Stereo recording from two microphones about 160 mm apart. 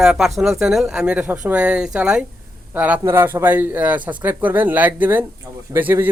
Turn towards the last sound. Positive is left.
turn(degrees=-10)  # may be behind; listen again after turning